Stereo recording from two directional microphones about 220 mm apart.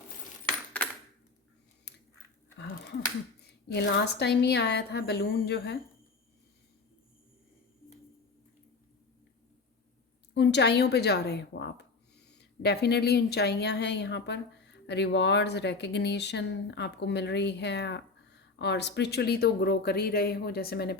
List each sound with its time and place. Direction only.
1.9 s a sound: 50° left (ahead or behind)
3.7 s a woman's voice: 50° left (ahead or behind)
10.3 s a woman's voice: 50° left (ahead or behind)